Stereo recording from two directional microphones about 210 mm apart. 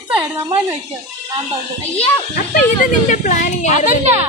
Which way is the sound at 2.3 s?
40° left (ahead or behind).